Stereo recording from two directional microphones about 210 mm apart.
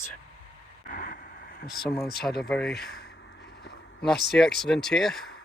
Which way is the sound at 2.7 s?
50° left (ahead or behind).